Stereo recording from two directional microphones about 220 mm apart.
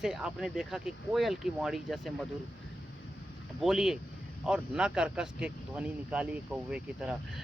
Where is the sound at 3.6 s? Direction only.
Centre (ahead or behind).